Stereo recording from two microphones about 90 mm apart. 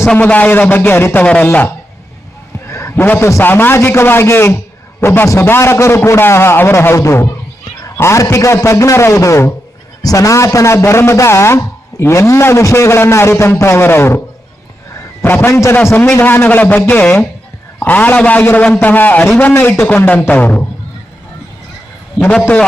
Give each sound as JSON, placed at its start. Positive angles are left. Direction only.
{"t": 0.2, "sound": "a man's voice", "side_deg": 20}
{"t": 2.6, "sound": "a sound", "side_deg": 30}
{"t": 3.4, "sound": "a man's voice", "side_deg": 25}
{"t": 15.2, "sound": "a man's voice", "side_deg": 25}